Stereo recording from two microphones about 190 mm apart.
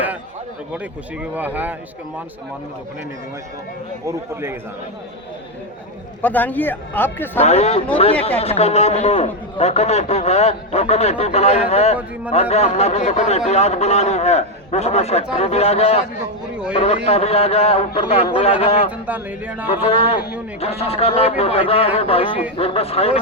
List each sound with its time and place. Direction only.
1.2 s speech: 10° right (ahead or behind)
4.0 s speech: 15° right (ahead or behind)
6.2 s speech: 10° left (ahead or behind)
7.4 s a man's voice: 35° left (ahead or behind)
18.9 s speech: 10° right (ahead or behind)
19.7 s a man's voice: 30° left (ahead or behind)